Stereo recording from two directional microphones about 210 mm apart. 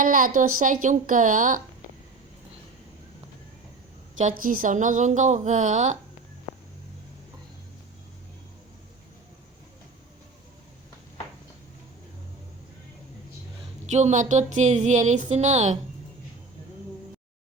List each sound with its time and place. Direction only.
0.0 s speech: 40° right (ahead or behind)
4.2 s speech: 40° right (ahead or behind)
13.9 s speech: 35° right (ahead or behind)